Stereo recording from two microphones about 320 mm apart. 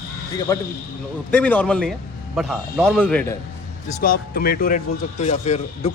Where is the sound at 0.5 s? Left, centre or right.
Centre.